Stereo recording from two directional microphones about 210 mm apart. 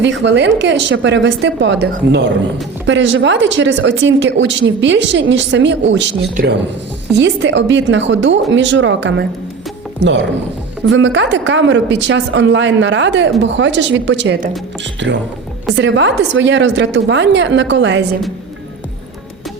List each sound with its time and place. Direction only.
0.0 s speech: 55° right (ahead or behind)
6.4 s speech: 40° right (ahead or behind)
7.1 s speech: 55° right (ahead or behind)